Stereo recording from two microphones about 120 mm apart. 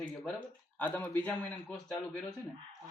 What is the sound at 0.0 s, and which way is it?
Speech, 10° left (ahead or behind).